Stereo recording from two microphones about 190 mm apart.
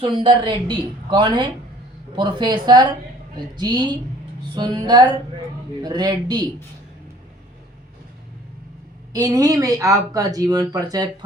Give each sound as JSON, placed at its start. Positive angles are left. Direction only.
{"t": 0.0, "sound": "speech", "side_deg": -25}
{"t": 9.1, "sound": "speech", "side_deg": -20}